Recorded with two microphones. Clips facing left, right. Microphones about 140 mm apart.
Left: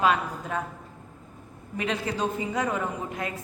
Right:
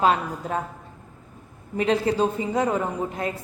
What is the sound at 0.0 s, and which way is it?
Speech, 35° right (ahead or behind).